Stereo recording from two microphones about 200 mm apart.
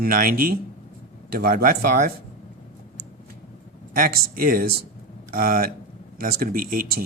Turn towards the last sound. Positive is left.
turn(degrees=-45)  # may be behind; listen again after turning